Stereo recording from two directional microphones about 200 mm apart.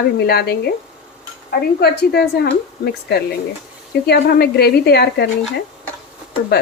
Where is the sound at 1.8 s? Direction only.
55° left (ahead or behind).